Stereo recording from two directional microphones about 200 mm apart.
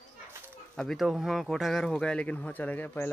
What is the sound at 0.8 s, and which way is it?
Speech, centre (ahead or behind).